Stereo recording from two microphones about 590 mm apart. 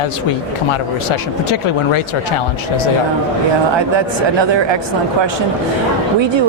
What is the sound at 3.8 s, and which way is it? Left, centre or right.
Speech, right.